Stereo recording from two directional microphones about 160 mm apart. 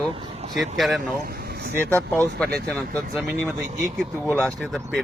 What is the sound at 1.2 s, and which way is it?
Vehicle, 85° right.